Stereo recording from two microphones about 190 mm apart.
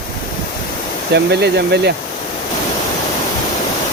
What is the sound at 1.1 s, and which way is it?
Speech, 60° right (ahead or behind).